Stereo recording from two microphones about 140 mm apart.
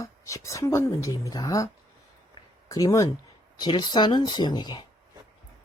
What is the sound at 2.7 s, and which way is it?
Speech, 25° left (ahead or behind).